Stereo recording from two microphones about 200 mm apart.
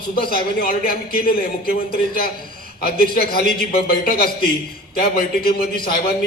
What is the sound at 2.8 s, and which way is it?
Speech, 50° left (ahead or behind).